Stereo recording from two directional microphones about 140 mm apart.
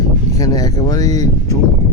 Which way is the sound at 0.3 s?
25° left (ahead or behind).